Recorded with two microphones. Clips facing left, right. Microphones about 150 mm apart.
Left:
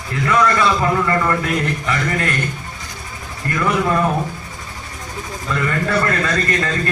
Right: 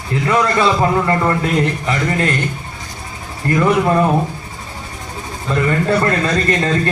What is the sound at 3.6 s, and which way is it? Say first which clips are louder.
Speech: right 4 dB; 30° right (ahead or behind).